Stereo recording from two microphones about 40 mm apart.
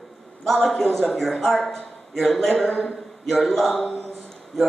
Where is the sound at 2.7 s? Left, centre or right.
Left.